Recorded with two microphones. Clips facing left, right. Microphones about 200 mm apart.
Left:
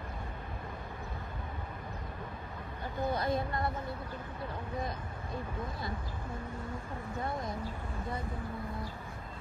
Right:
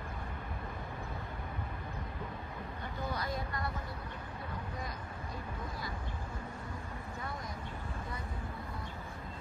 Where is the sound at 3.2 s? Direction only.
25° left (ahead or behind).